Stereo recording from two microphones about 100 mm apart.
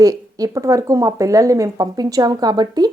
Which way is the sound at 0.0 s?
35° right (ahead or behind).